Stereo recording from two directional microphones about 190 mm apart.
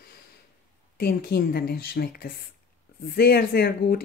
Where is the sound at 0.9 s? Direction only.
55° left (ahead or behind).